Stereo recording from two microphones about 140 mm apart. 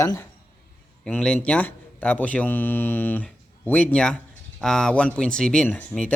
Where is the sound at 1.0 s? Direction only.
5° left (ahead or behind).